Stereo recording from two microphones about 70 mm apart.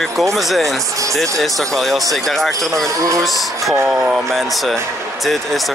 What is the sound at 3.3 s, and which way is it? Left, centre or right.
Speech, centre.